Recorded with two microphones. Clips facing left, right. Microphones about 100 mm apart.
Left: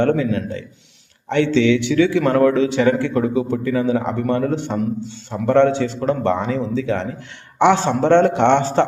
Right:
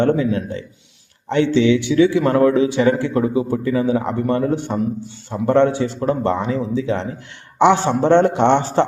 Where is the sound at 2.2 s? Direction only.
30° right (ahead or behind).